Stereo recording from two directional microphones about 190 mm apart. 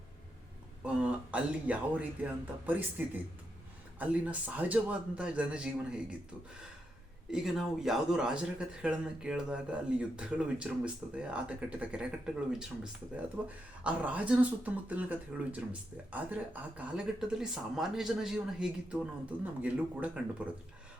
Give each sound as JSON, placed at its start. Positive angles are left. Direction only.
{"t": 0.9, "sound": "speech", "side_deg": -5}
{"t": 3.9, "sound": "speech", "side_deg": -10}
{"t": 7.3, "sound": "speech", "side_deg": 0}